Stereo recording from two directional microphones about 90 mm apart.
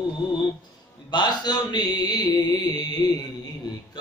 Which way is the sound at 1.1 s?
50° left (ahead or behind).